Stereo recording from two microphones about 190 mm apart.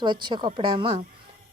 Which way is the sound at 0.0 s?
25° right (ahead or behind).